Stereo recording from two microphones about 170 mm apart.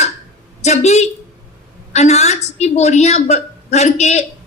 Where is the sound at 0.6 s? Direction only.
40° left (ahead or behind).